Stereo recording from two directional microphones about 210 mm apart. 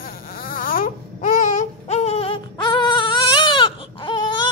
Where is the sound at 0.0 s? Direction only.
45° left (ahead or behind).